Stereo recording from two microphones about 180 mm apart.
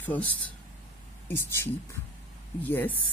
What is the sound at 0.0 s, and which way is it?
Speech, 10° left (ahead or behind).